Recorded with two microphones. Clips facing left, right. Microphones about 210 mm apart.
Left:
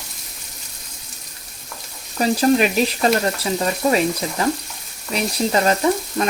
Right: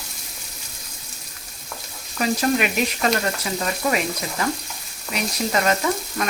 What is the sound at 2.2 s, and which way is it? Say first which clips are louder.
Frying: left 5 dB; 35° left (ahead or behind).